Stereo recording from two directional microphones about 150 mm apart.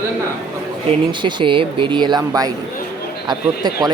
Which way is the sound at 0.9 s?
35° right (ahead or behind).